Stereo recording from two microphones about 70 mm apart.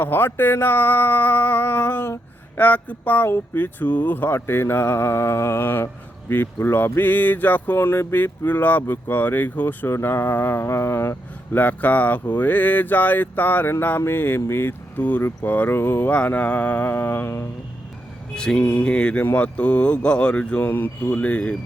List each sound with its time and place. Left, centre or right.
0.0 s mantra: left
4.4 s mantra: left
14.0 s speech: left
15.4 s mantra: left
18.3 s speech: centre
20.7 s mantra: left